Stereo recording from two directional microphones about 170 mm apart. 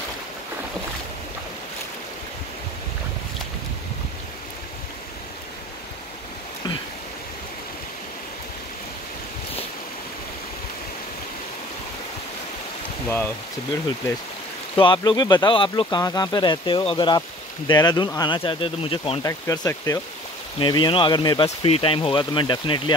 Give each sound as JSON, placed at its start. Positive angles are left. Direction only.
{"t": 14.8, "sound": "speech", "side_deg": 25}
{"t": 19.2, "sound": "speech", "side_deg": 20}